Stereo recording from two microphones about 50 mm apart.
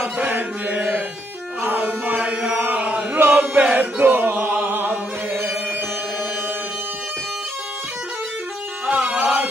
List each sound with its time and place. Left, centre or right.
0.3 s chant: right
1.6 s music: right
2.1 s chant: right
8.8 s music: right